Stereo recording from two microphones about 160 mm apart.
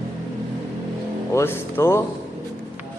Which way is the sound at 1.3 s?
15° left (ahead or behind).